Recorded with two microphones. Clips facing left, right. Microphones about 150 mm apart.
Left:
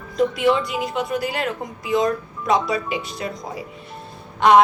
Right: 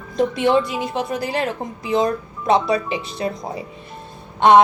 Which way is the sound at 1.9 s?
30° right (ahead or behind).